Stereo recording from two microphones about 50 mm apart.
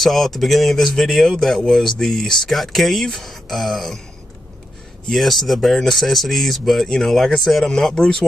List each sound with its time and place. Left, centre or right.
0.0 s speech: centre
5.1 s speech: centre